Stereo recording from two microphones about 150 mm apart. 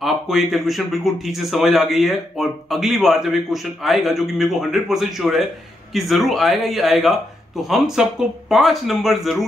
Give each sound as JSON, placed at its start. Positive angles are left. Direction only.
{"t": 0.0, "sound": "speech", "side_deg": 0}